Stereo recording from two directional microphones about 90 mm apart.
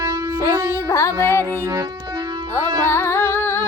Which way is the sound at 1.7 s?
45° right (ahead or behind).